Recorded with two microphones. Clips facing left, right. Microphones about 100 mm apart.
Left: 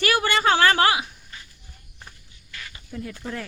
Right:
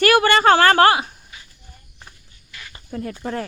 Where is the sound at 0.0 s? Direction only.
60° right (ahead or behind).